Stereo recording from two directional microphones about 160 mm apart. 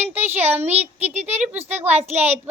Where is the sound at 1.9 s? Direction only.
45° right (ahead or behind).